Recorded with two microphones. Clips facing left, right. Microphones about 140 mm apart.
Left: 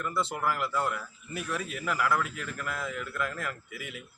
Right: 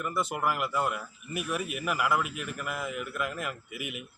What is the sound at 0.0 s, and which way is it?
Speech, 15° right (ahead or behind).